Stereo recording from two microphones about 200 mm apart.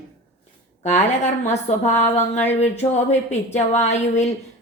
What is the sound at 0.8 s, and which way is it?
Speech, 35° left (ahead or behind).